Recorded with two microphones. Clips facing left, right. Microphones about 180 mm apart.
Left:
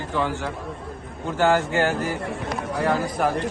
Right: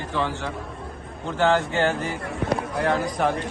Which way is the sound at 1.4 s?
10° left (ahead or behind).